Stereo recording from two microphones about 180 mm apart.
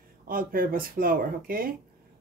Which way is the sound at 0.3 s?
55° right (ahead or behind).